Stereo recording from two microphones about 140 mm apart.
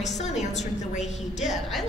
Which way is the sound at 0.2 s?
55° left (ahead or behind).